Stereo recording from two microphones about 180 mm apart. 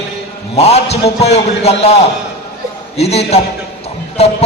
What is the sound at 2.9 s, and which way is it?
A man's voice, 35° left (ahead or behind).